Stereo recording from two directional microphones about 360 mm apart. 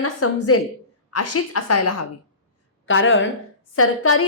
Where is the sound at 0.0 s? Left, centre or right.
Left.